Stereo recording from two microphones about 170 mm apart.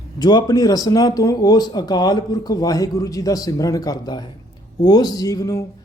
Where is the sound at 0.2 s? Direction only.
25° left (ahead or behind).